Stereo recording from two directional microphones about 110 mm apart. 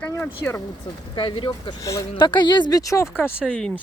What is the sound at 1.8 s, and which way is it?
Speech, 30° left (ahead or behind).